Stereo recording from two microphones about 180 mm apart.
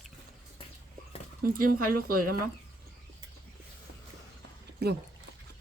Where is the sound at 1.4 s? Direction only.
55° right (ahead or behind).